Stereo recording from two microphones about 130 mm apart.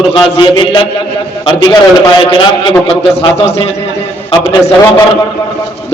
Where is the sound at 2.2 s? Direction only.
40° left (ahead or behind).